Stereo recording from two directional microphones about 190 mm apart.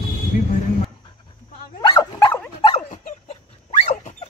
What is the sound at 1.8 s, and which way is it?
Dog, 20° left (ahead or behind).